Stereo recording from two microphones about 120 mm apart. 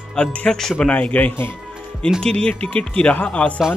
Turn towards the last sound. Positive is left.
turn(degrees=10)  # may be behind; listen again after turning